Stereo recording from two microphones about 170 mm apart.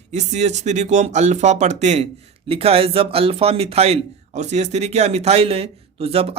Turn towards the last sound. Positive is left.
turn(degrees=-35)  # may be behind; listen again after turning